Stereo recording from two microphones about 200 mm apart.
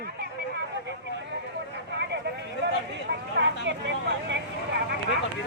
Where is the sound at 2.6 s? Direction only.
65° right (ahead or behind).